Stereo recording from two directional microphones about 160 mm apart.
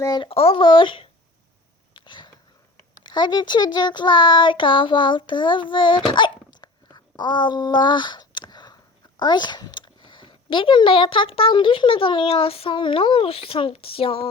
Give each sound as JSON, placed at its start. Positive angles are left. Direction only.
{"t": 0.0, "sound": "speech", "side_deg": 30}
{"t": 1.9, "sound": "a sound", "side_deg": 30}
{"t": 3.0, "sound": "a child's voice", "side_deg": 25}
{"t": 6.1, "sound": "babbling", "side_deg": 30}
{"t": 9.1, "sound": "speech", "side_deg": 30}